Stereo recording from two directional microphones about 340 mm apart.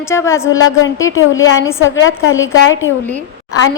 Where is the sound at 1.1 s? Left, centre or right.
Left.